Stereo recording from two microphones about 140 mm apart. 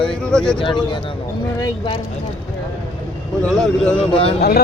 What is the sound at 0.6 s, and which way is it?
A man's voice, 35° left (ahead or behind).